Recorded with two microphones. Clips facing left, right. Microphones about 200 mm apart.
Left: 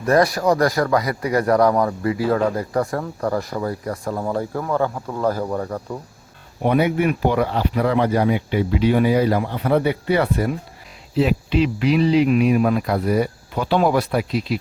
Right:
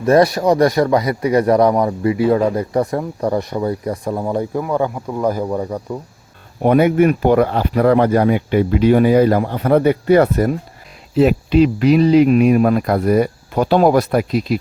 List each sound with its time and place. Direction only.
0.0 s speech: 25° right (ahead or behind)
6.6 s speech: 50° right (ahead or behind)